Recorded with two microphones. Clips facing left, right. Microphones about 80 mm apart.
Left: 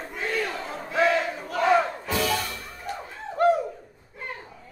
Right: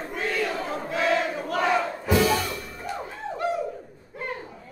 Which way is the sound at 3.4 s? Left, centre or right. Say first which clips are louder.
Left 8 dB; left.